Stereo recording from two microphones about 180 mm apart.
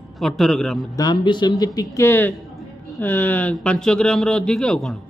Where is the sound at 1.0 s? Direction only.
25° left (ahead or behind); by 5.0 s 5° left (ahead or behind).